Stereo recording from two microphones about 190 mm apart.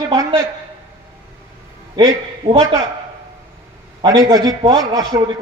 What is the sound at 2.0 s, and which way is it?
Speech, 25° right (ahead or behind).